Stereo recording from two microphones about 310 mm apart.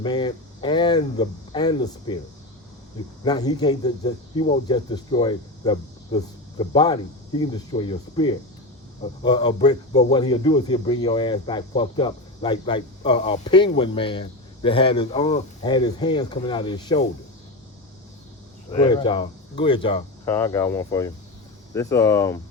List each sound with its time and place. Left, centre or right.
0.0 s speech: centre
3.2 s speech: centre
18.7 s speech: centre